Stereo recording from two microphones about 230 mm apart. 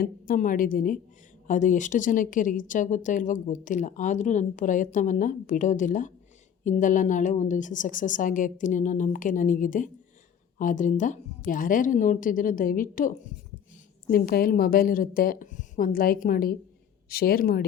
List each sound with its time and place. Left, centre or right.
0.0 s speech: left